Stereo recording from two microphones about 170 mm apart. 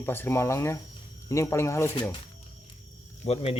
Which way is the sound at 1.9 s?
30° left (ahead or behind).